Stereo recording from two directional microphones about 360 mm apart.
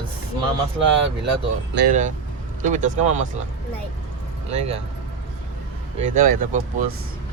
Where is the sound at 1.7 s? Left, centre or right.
Right.